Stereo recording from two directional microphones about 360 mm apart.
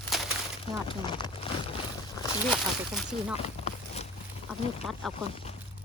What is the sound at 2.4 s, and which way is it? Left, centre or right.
Speech, centre.